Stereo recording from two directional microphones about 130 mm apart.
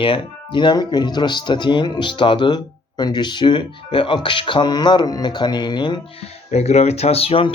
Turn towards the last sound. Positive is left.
turn(degrees=45)  # may be behind; listen again after turning